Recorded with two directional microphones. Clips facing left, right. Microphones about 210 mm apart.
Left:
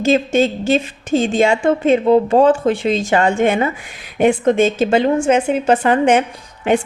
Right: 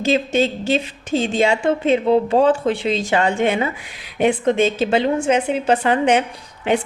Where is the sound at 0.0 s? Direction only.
45° left (ahead or behind).